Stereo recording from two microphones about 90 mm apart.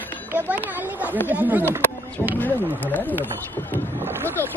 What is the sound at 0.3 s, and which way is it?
Children playing, 25° right (ahead or behind).